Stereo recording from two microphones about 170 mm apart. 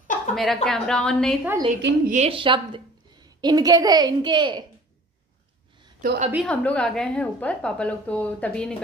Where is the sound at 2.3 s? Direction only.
30° right (ahead or behind).